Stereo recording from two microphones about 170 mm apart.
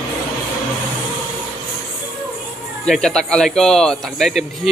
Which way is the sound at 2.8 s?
Centre (ahead or behind).